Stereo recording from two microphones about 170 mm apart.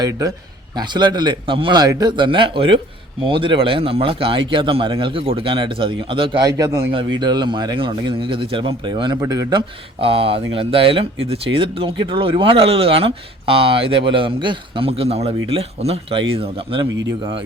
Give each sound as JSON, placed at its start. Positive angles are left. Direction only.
{"t": 0.0, "sound": "speech", "side_deg": -20}
{"t": 16.9, "sound": "speech", "side_deg": -90}